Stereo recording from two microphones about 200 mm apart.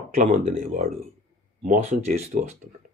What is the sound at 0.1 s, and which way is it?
Speech, 35° right (ahead or behind).